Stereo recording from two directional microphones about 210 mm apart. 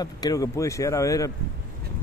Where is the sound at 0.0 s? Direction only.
15° left (ahead or behind).